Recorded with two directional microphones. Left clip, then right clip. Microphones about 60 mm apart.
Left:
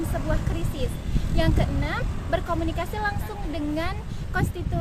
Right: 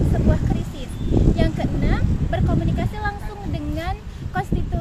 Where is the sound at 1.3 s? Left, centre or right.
Left.